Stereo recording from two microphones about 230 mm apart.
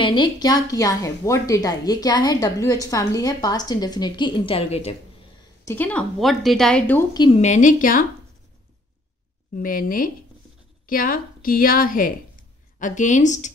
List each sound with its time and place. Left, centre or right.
0.0 s a woman's voice: centre
5.7 s a woman's voice: centre
7.2 s a woman's voice: left
9.6 s a woman's voice: left